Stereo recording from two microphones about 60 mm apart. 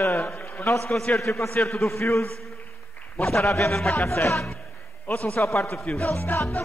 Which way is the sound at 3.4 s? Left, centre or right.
Left.